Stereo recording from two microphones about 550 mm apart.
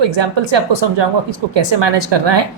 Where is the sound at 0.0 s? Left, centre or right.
Right.